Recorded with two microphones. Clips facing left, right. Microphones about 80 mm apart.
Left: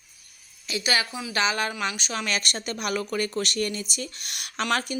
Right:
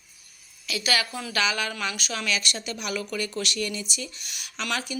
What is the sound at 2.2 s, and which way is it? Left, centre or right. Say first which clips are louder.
A woman's voice: right 1 dB; left.